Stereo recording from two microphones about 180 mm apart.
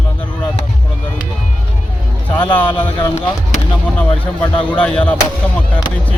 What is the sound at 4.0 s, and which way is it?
Speech, 10° left (ahead or behind).